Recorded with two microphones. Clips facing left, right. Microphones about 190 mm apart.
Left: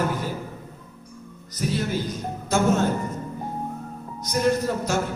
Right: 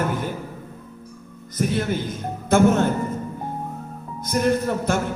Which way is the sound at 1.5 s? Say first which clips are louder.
Right 3 dB; 55° right (ahead or behind).